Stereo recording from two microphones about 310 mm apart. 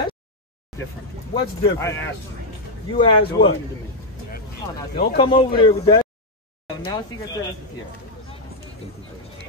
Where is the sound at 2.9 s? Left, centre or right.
Centre.